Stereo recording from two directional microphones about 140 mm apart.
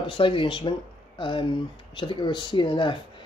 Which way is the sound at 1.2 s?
35° left (ahead or behind).